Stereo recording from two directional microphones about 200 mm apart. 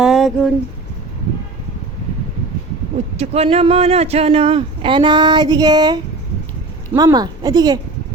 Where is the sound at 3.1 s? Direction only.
30° right (ahead or behind).